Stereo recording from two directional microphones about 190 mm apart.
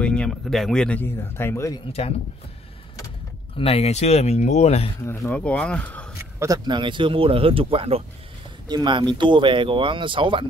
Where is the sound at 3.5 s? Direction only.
30° left (ahead or behind).